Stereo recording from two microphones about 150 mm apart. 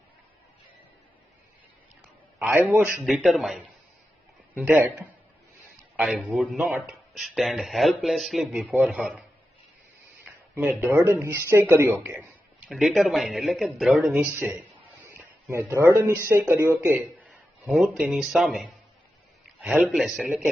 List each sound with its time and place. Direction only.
2.4 s speech: 10° right (ahead or behind)
3.1 s speech: centre (ahead or behind)
4.5 s speech: 10° right (ahead or behind)
5.7 s speech: centre (ahead or behind)
10.6 s speech: 15° right (ahead or behind)
12.0 s a sound: 10° right (ahead or behind)
12.7 s speech: centre (ahead or behind)
14.1 s speech: 15° right (ahead or behind)
15.0 s a sound: 15° right (ahead or behind)
16.2 s speech: 15° right (ahead or behind)
17.2 s speech: centre (ahead or behind)